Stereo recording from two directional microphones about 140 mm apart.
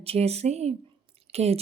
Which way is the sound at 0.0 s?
45° right (ahead or behind).